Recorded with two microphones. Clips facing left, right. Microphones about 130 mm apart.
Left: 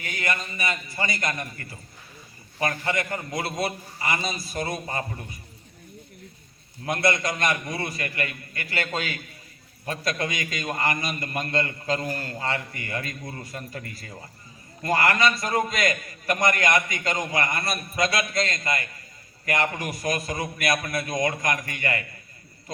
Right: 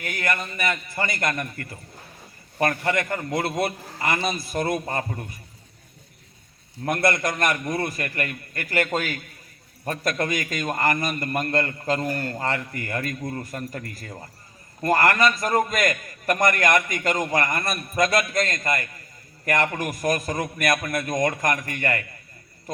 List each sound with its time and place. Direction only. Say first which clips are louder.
0.0 s a man's voice: right 2 dB; 55° right (ahead or behind)
6.8 s a man's voice: right 2 dB; 50° right (ahead or behind)